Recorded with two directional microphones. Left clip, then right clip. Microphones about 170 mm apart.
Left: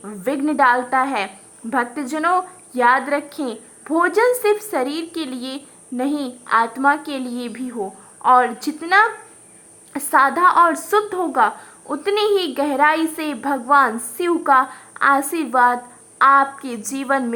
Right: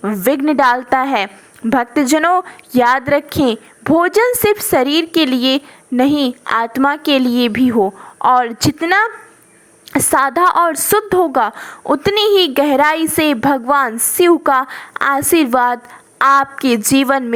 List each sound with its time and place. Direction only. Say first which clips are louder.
0.0 s a woman's voice: right 8 dB; 35° right (ahead or behind)